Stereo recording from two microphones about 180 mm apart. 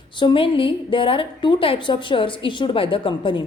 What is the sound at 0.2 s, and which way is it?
A woman's voice, 30° left (ahead or behind).